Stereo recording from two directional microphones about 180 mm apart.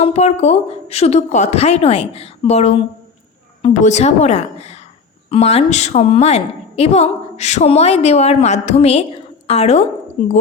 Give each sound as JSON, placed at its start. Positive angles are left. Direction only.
{"t": 0.0, "sound": "a woman's voice", "side_deg": 35}